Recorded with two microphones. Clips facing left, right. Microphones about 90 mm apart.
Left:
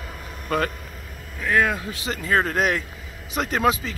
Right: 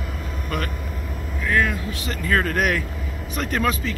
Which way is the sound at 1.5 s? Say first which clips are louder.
Left 1 dB; 30° left (ahead or behind).